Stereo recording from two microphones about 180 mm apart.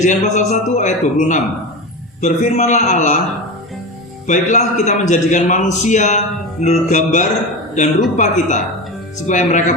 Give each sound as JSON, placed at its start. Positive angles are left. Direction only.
{"t": 0.0, "sound": "a man's voice", "side_deg": 40}
{"t": 4.3, "sound": "a man's voice", "side_deg": 45}